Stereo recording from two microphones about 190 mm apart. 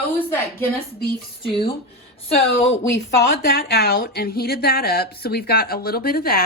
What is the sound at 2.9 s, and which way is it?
A woman's voice, 60° left (ahead or behind).